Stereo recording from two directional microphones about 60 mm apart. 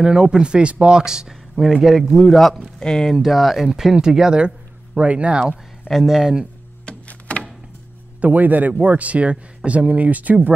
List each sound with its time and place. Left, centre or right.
0.0 s speech: centre
3.2 s speech: centre
4.9 s speech: centre
5.9 s speech: centre
6.9 s a sound: left
8.2 s speech: right